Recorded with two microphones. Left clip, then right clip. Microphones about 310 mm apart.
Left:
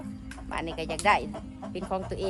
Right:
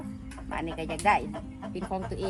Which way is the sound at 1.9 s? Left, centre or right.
Centre.